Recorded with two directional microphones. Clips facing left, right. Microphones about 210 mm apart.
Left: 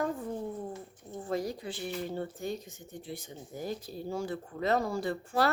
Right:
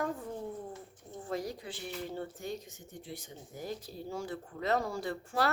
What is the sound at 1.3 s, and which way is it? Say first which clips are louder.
Speech: left 4 dB; 30° left (ahead or behind).